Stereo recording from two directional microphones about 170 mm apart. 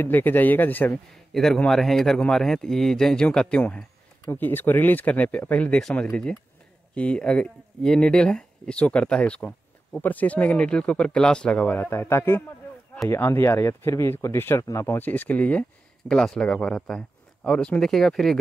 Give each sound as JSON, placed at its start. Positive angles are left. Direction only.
{"t": 0.0, "sound": "a man's voice", "side_deg": 10}